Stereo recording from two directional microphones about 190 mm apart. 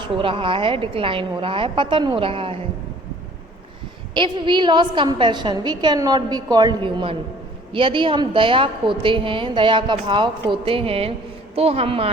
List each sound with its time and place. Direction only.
0.0 s a woman's voice: 30° right (ahead or behind)
4.1 s a woman's voice: 25° right (ahead or behind)